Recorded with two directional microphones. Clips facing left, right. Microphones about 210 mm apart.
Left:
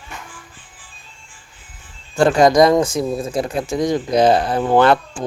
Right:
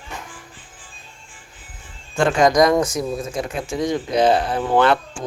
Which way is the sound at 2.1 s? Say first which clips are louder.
Left 3 dB; 35° left (ahead or behind).